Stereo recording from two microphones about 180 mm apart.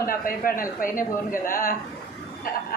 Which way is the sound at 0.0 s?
50° left (ahead or behind).